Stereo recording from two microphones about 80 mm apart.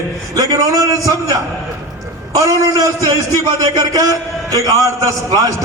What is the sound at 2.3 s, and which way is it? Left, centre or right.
A man's voice, right.